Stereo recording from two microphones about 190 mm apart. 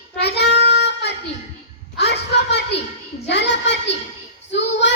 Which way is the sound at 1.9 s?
60° left (ahead or behind).